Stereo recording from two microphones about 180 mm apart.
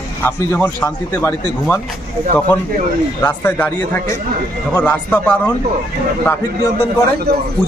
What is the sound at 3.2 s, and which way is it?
Speech, 10° left (ahead or behind).